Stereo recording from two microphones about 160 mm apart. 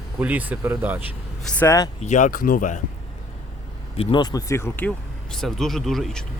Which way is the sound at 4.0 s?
30° left (ahead or behind).